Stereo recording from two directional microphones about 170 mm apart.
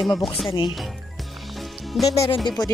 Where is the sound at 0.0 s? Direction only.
Centre (ahead or behind).